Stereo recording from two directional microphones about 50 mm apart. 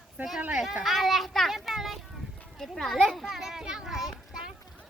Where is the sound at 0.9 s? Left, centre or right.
Centre.